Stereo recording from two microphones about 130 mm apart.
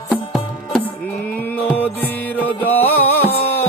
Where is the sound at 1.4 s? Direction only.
15° left (ahead or behind).